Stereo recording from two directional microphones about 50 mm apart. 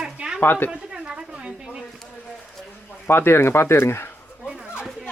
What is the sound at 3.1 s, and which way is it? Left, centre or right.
Speech, left.